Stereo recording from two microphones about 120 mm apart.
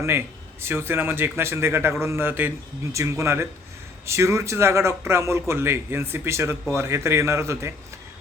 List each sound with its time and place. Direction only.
0.6 s a man's voice: 20° right (ahead or behind)